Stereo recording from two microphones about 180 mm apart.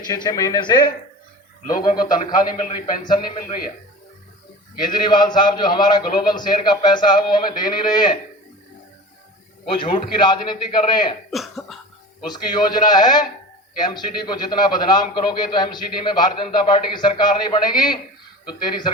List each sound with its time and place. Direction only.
0.1 s a man's voice: 20° left (ahead or behind)
3.1 s a man's voice: 25° left (ahead or behind)
4.7 s a man's voice: 25° left (ahead or behind)
9.6 s a man's voice: 30° left (ahead or behind)
11.3 s cough: centre (ahead or behind)
12.2 s a man's voice: 25° left (ahead or behind)